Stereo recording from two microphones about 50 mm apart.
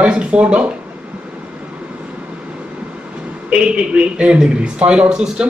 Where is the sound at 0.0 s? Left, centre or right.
Right.